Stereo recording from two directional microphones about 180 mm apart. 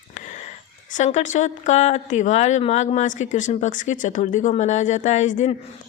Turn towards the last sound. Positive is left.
turn(degrees=40)  # may be behind; listen again after turning